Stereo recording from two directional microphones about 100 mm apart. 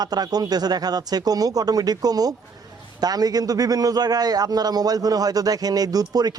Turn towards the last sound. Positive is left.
turn(degrees=-40)  # may be behind; listen again after turning